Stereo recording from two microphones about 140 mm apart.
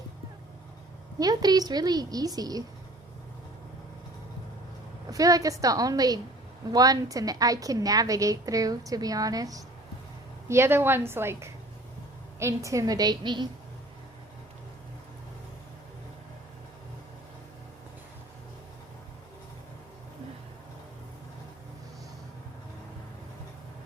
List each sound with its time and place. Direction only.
1.2 s a woman's voice: 25° right (ahead or behind)
5.1 s a woman's voice: 25° right (ahead or behind)